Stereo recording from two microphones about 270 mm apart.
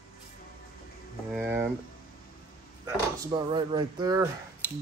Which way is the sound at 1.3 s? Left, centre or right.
Centre.